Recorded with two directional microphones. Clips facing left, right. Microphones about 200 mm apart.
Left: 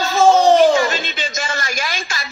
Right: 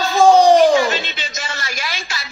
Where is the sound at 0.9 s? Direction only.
45° left (ahead or behind).